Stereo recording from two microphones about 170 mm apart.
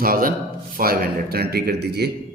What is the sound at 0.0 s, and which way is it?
Speech, 55° right (ahead or behind).